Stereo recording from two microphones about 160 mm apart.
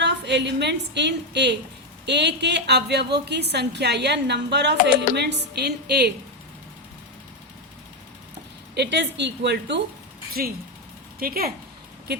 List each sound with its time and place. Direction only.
0.0 s a woman's voice: 90° right
8.7 s a woman's voice: 90° right
11.2 s speech: 70° right (ahead or behind)